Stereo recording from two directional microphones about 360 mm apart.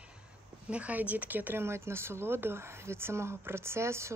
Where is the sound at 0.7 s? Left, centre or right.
Centre.